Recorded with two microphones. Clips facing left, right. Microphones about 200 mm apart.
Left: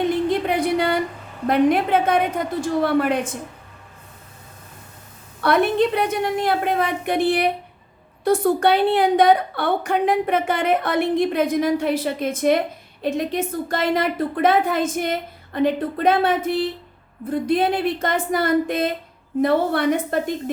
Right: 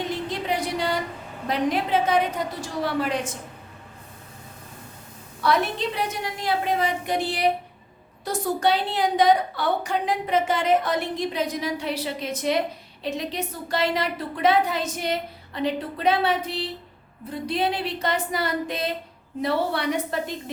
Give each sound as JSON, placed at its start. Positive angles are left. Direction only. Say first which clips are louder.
{"t": 0.0, "sound": "a sound", "louder": "left 9 dB", "side_deg": 55}
{"t": 1.5, "sound": "a woman's voice", "louder": "left 7 dB", "side_deg": 55}
{"t": 5.4, "sound": "a woman's voice", "louder": "left 6 dB", "side_deg": 55}